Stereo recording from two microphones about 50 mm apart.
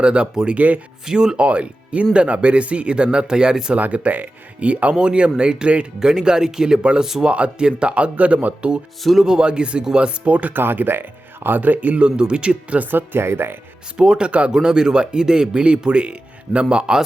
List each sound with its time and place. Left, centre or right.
0.0 s speech: centre
1.0 s speech: centre
1.4 s speech: right
3.8 s speech: right
9.2 s speech: centre
10.2 s speech: right
10.6 s speech: right
12.8 s speech: right
13.9 s speech: centre